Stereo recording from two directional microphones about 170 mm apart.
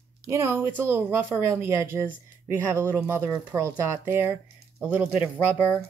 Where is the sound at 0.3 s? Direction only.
15° right (ahead or behind).